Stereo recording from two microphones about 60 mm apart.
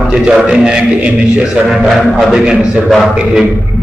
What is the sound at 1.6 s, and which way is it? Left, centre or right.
A man's voice, centre.